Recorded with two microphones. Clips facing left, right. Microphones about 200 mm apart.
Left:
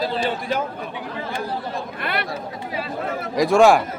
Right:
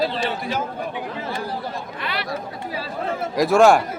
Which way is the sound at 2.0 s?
55° left (ahead or behind).